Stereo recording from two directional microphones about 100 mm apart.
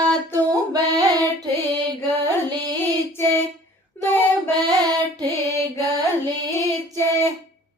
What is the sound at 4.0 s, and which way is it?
Child singing, 20° left (ahead or behind).